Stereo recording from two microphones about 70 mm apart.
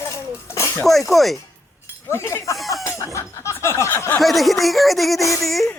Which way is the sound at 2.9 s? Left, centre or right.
Left.